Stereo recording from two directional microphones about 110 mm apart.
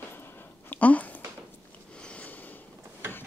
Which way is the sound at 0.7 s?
15° left (ahead or behind).